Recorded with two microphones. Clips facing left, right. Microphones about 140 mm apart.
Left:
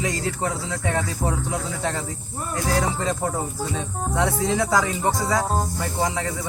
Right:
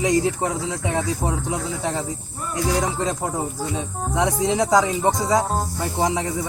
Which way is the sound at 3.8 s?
15° right (ahead or behind).